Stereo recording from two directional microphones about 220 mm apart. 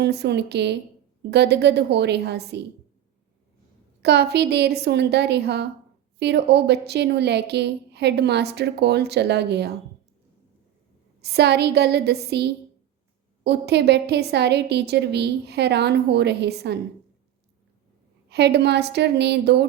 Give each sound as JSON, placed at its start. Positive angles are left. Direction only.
{"t": 0.0, "sound": "a woman's voice", "side_deg": -50}
{"t": 4.0, "sound": "a woman's voice", "side_deg": -50}
{"t": 11.2, "sound": "a woman's voice", "side_deg": -50}
{"t": 18.3, "sound": "a woman's voice", "side_deg": -50}